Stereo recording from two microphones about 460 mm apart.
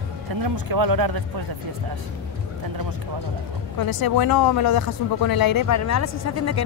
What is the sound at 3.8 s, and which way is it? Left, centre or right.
Speech, left.